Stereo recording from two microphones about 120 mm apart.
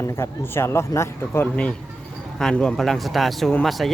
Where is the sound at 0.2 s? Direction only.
20° left (ahead or behind).